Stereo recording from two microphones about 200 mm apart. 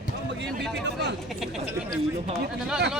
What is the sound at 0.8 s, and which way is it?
Speech, 60° right (ahead or behind).